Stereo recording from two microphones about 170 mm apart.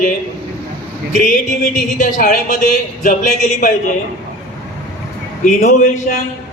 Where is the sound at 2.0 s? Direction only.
55° left (ahead or behind).